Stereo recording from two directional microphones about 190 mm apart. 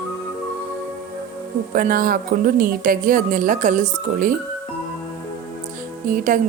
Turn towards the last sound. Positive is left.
turn(degrees=-45)  # may be behind; listen again after turning